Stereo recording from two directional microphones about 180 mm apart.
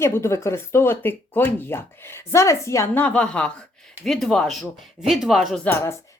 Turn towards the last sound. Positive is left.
turn(degrees=15)  # may be behind; listen again after turning